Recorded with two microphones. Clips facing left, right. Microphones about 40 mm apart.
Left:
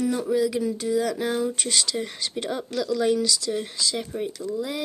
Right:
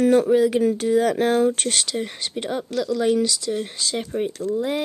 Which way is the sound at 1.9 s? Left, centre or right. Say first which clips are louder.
Right 2 dB; right.